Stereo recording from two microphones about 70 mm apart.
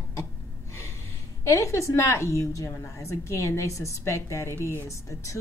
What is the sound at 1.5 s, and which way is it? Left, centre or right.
Speech, left.